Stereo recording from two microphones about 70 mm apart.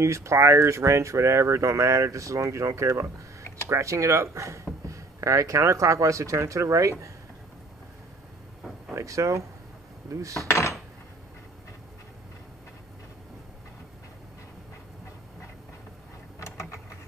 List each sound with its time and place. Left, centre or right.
0.0 s speech: right
8.9 s speech: right
10.5 s dishes: left
16.3 s a sound: left